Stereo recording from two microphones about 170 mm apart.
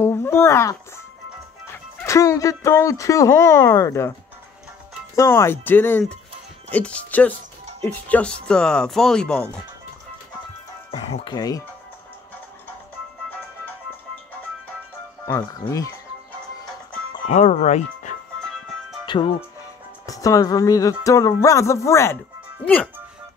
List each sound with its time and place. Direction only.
0.0 s a sound: 15° left (ahead or behind)
2.0 s speech: 20° left (ahead or behind)
5.1 s speech: 15° left (ahead or behind)
10.9 s speech: 35° left (ahead or behind)
11.3 s speech: 20° left (ahead or behind)
15.6 s speech: 20° left (ahead or behind)
17.3 s speech: 45° left (ahead or behind)
19.0 s speech: 30° left (ahead or behind)